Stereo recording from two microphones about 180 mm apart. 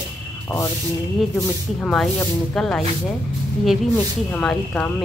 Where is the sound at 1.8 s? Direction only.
Centre (ahead or behind).